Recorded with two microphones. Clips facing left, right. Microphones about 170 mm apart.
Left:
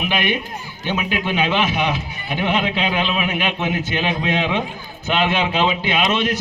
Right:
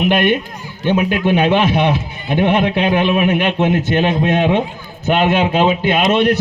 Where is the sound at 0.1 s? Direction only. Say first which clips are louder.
Right 7 dB; 50° right (ahead or behind).